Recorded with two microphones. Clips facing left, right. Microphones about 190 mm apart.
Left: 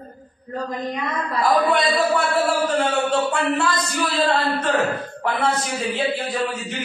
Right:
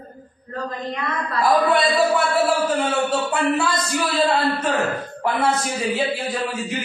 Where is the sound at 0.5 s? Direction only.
15° left (ahead or behind).